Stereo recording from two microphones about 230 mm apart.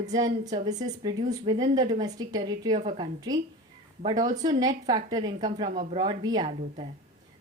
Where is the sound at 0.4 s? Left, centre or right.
Centre.